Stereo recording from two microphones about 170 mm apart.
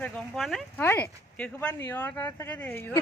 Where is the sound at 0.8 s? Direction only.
10° left (ahead or behind).